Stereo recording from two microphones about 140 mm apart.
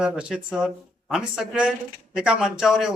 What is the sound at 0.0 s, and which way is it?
Speech, 5° right (ahead or behind).